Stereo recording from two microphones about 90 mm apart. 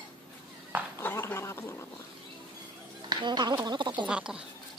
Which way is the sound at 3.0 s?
50° right (ahead or behind).